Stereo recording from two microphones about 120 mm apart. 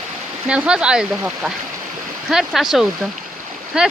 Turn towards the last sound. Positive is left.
turn(degrees=-5)  # may be behind; listen again after turning